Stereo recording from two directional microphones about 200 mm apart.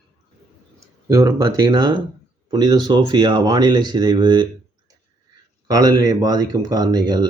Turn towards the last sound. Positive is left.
turn(degrees=-20)  # may be behind; listen again after turning